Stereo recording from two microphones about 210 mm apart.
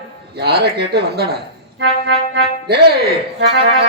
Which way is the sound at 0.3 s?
50° right (ahead or behind).